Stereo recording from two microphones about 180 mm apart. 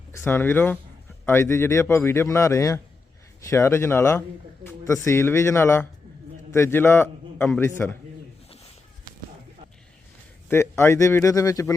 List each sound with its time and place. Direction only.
0.1 s a man's voice: 15° left (ahead or behind)
10.5 s a man's voice: 15° left (ahead or behind)